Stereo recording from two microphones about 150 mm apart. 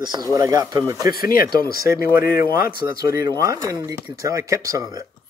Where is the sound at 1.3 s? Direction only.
80° left.